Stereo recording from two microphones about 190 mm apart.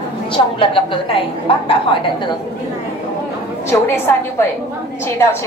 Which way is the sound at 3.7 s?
15° left (ahead or behind).